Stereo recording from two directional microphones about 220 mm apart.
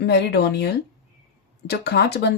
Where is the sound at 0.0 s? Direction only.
50° left (ahead or behind).